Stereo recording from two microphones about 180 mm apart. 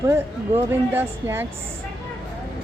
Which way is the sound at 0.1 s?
10° right (ahead or behind).